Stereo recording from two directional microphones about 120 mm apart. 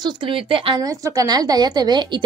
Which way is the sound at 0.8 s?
30° right (ahead or behind).